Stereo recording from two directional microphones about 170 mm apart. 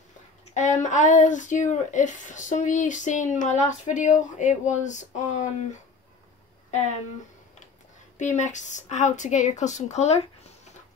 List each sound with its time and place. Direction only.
0.8 s speech: 45° left (ahead or behind)
8.2 s speech: 45° left (ahead or behind)